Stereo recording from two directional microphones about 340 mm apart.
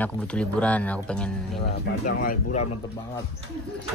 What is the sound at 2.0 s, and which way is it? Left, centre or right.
Speech, left.